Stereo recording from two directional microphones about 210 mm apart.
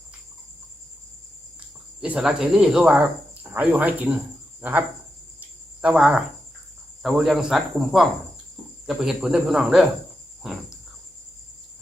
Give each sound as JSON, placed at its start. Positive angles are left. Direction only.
{"t": 2.0, "sound": "speech", "side_deg": -5}
{"t": 5.4, "sound": "cricket", "side_deg": -5}
{"t": 7.0, "sound": "speech", "side_deg": 0}